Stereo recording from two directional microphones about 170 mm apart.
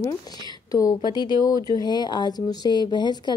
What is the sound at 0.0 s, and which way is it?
Speech, 20° left (ahead or behind).